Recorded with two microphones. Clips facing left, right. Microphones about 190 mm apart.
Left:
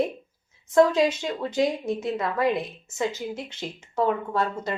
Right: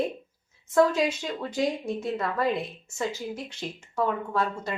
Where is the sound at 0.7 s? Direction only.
20° left (ahead or behind).